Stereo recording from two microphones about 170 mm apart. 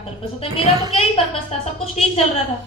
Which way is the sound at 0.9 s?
35° left (ahead or behind).